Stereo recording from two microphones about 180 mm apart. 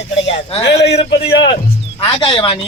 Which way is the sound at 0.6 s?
70° left (ahead or behind).